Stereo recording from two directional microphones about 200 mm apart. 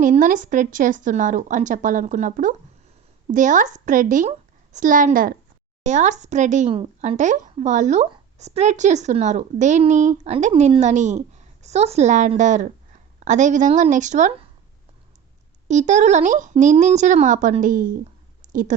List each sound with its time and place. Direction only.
0.0 s a woman's voice: 40° right (ahead or behind)
15.6 s speech: 35° right (ahead or behind)
18.4 s a sound: 40° right (ahead or behind)